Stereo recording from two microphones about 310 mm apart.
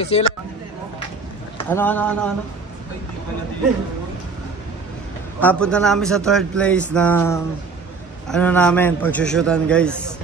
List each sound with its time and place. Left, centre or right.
0.0 s speech: centre
1.7 s speech: centre
5.4 s speech: centre